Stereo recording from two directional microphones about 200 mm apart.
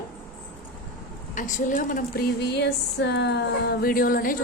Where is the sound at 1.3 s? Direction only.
40° left (ahead or behind).